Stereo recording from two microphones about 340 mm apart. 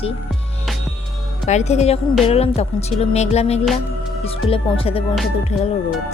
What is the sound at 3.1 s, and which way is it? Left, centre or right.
Speech, centre.